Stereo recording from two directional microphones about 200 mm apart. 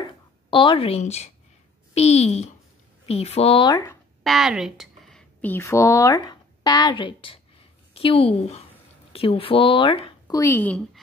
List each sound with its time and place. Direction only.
0.5 s a woman's voice: 25° left (ahead or behind)
4.2 s speech: centre (ahead or behind)